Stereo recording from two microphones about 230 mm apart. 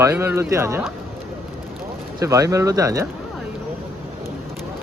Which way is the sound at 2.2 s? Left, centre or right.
Centre.